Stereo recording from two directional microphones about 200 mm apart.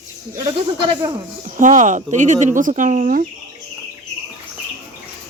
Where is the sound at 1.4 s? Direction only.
40° right (ahead or behind).